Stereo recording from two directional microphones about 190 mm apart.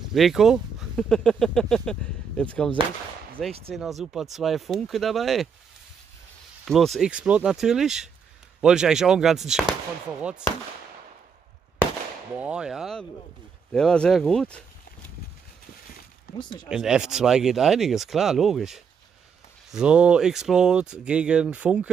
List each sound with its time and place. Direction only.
0.1 s speech: centre (ahead or behind)
6.6 s speech: centre (ahead or behind)
12.4 s speech: 5° right (ahead or behind)
16.3 s speech: 25° left (ahead or behind)
16.6 s speech: 5° right (ahead or behind)